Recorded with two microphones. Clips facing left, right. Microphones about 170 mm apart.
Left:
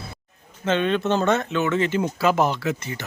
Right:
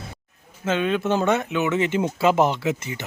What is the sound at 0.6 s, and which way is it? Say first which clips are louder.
Speech: left 1 dB; 5° right (ahead or behind).